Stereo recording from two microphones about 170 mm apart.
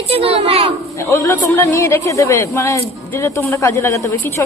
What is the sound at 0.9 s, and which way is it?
A woman's voice, 15° left (ahead or behind).